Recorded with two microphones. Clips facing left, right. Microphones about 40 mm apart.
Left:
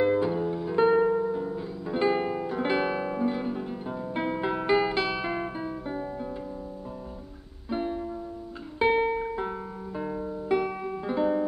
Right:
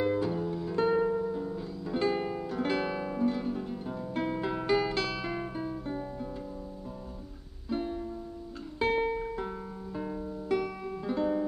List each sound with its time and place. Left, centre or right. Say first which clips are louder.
0.0 s music: left 5 dB; left
7.7 s music: left 3 dB; left